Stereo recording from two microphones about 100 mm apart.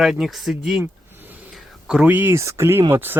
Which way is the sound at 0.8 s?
20° right (ahead or behind).